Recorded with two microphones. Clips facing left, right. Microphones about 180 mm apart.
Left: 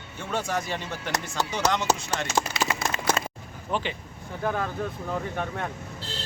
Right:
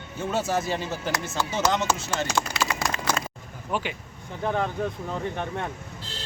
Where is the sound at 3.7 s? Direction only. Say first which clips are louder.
Even; 10° right (ahead or behind).